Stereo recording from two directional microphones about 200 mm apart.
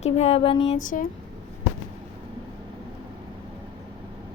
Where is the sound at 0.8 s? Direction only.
40° left (ahead or behind).